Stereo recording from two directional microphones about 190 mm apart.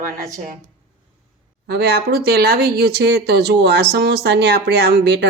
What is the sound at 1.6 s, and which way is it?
Speech, 60° right (ahead or behind).